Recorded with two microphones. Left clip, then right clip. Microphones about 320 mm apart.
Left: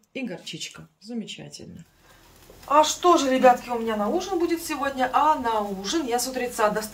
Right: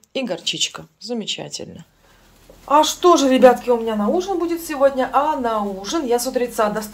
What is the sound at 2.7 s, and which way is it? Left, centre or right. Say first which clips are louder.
Speech: right 4 dB; right.